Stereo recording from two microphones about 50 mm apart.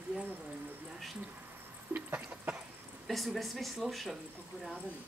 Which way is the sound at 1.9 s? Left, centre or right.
Right.